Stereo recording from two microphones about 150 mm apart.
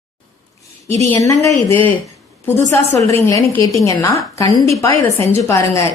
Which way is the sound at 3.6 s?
20° left (ahead or behind).